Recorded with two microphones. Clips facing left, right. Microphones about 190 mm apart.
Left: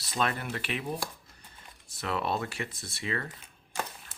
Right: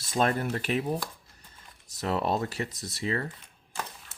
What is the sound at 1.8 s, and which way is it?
Speech, 40° right (ahead or behind).